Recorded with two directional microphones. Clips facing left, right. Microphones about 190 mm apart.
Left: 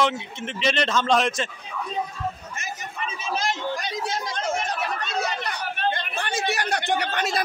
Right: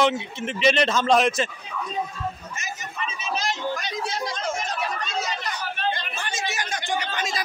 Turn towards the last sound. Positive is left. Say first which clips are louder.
# left 3 dB
turn(degrees=65)  # may be behind; listen again after turning